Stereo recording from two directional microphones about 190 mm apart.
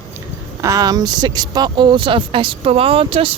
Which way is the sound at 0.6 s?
15° right (ahead or behind).